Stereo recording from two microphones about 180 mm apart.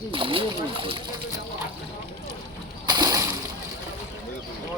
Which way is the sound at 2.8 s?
25° right (ahead or behind).